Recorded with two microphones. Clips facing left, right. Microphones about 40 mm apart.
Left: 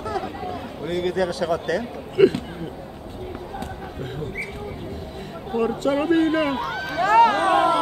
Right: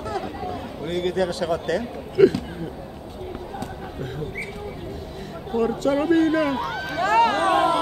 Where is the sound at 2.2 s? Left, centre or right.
Left.